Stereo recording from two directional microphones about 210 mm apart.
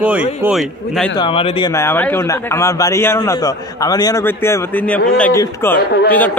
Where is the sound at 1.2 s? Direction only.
25° left (ahead or behind).